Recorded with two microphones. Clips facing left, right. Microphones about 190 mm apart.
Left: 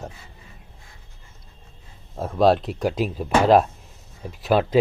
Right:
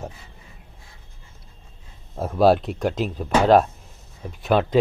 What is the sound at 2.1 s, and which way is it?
Speech, 5° right (ahead or behind).